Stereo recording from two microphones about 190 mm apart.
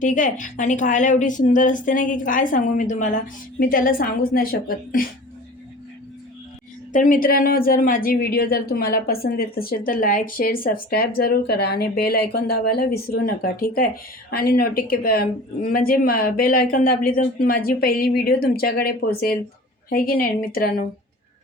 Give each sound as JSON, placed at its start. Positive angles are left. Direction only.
{"t": 0.0, "sound": "speech", "side_deg": 40}
{"t": 6.9, "sound": "speech", "side_deg": 45}